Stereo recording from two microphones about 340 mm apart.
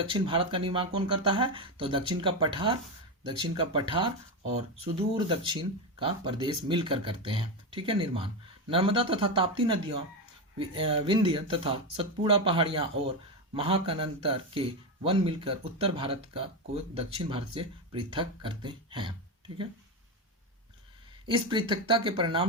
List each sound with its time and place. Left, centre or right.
0.1 s speech: centre
5.3 s speech: centre
21.2 s speech: centre